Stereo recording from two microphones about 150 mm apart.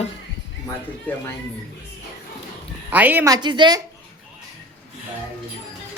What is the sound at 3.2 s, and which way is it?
Speech, 30° right (ahead or behind).